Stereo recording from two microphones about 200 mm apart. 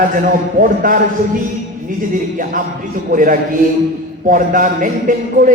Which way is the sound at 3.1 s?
40° right (ahead or behind).